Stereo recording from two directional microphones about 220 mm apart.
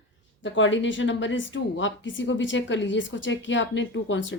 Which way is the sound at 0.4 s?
55° left (ahead or behind).